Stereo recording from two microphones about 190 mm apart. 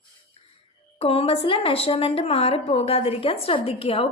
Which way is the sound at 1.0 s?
30° left (ahead or behind).